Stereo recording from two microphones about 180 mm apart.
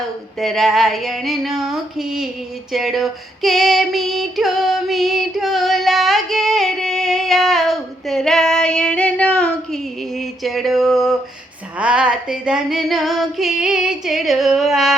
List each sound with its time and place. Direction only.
0.3 s female singing: centre (ahead or behind)